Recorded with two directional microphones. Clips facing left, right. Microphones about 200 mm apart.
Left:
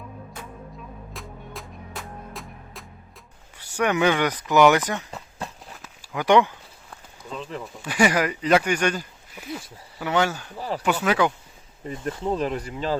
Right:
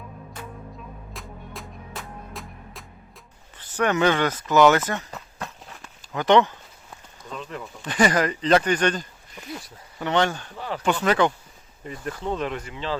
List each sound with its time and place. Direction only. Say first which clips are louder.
1.1 s music: even; centre (ahead or behind)
3.6 s speech: even; 10° left (ahead or behind)
5.8 s a sound: even; 10° left (ahead or behind)
7.6 s speech: even; 5° left (ahead or behind)
11.9 s speech: left 3 dB; 25° left (ahead or behind)
12.3 s speech: left 2 dB; 35° left (ahead or behind)